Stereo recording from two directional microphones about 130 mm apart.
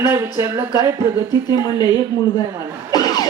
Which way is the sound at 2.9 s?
30° left (ahead or behind).